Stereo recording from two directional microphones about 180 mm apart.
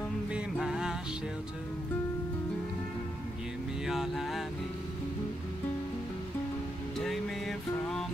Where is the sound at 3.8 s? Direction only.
Centre (ahead or behind).